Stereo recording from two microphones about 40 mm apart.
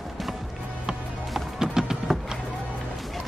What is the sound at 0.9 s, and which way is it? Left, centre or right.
Music, centre.